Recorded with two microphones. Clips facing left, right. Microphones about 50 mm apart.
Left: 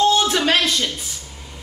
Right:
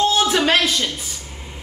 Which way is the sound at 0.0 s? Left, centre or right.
Centre.